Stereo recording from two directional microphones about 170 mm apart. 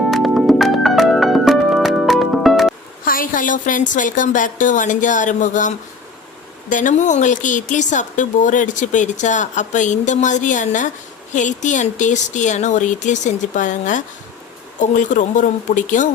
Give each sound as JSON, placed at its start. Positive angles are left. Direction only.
{"t": 0.0, "sound": "music", "side_deg": 0}
{"t": 3.0, "sound": "speech", "side_deg": 55}